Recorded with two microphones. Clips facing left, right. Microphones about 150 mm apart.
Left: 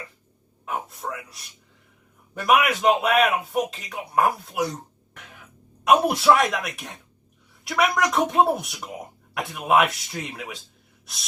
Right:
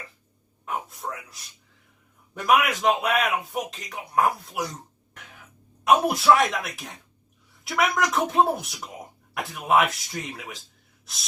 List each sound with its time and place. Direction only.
0.6 s a sound: centre (ahead or behind)
2.3 s speech: centre (ahead or behind)
5.8 s speech: centre (ahead or behind)